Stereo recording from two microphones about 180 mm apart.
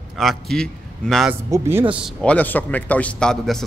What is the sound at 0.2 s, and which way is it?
Speech, centre (ahead or behind).